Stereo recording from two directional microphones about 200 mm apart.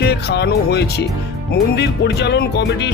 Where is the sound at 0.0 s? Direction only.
55° left (ahead or behind).